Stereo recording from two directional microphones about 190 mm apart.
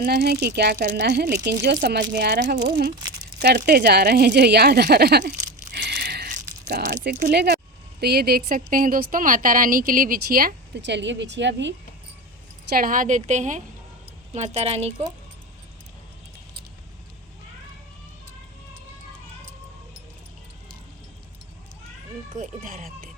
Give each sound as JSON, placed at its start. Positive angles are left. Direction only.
{"t": 0.0, "sound": "speech", "side_deg": -55}
{"t": 5.7, "sound": "a sound", "side_deg": -60}
{"t": 8.0, "sound": "a woman's voice", "side_deg": -55}
{"t": 10.8, "sound": "a woman's voice", "side_deg": -70}
{"t": 12.7, "sound": "a woman's voice", "side_deg": -45}
{"t": 22.3, "sound": "a woman's voice", "side_deg": -45}